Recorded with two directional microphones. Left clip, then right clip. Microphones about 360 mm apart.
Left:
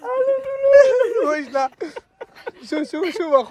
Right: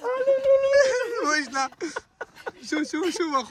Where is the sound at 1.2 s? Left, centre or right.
Centre.